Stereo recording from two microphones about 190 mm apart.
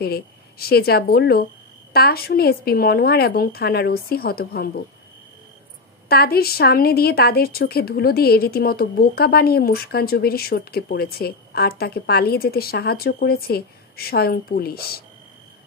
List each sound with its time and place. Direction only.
0.0 s a woman's voice: 55° left (ahead or behind)
6.0 s a woman's voice: 55° left (ahead or behind)